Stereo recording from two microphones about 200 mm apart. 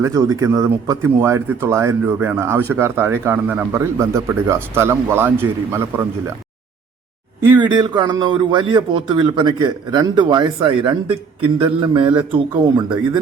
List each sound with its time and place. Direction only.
0.0 s speech: 15° right (ahead or behind)
7.6 s a man's voice: 20° right (ahead or behind)